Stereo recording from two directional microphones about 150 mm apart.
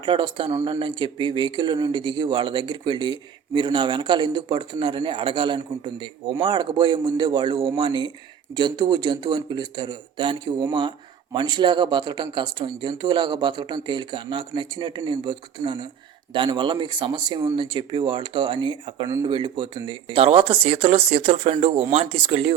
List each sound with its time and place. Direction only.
0.0 s a man's voice: 35° right (ahead or behind)
19.0 s a man's voice: 20° right (ahead or behind)
19.3 s a man's voice: 35° right (ahead or behind)